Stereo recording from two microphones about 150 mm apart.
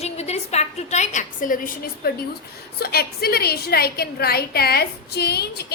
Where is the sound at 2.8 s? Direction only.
90° left.